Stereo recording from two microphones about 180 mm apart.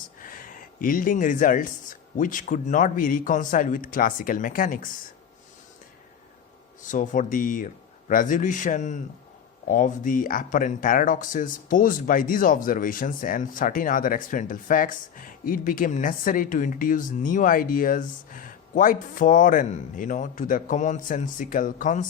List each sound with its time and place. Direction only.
0.2 s speech: 50° left (ahead or behind)
6.8 s speech: 45° left (ahead or behind)